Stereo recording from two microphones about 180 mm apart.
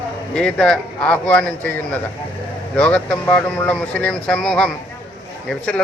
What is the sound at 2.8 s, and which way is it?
A man's voice, 5° left (ahead or behind).